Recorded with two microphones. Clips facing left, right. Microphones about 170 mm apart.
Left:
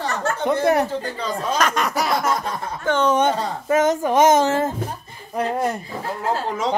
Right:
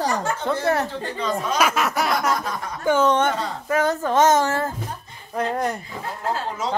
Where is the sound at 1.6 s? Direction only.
5° right (ahead or behind).